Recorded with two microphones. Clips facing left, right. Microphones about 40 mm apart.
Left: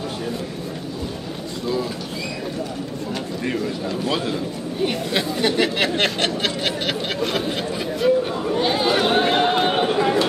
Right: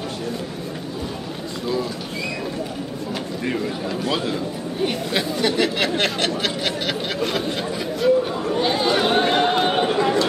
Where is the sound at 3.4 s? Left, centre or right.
Centre.